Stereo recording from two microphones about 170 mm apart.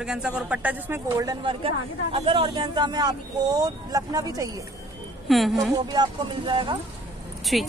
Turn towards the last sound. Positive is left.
turn(degrees=0)  # may be behind; listen again after turning